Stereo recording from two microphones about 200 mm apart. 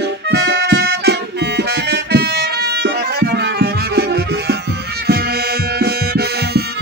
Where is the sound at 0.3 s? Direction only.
55° right (ahead or behind).